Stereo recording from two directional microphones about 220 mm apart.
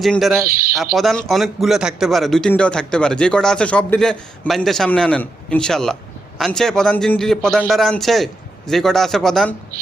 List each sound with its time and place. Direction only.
0.0 s a man's voice: centre (ahead or behind)
0.4 s speech: 40° right (ahead or behind)
0.9 s a man's voice: centre (ahead or behind)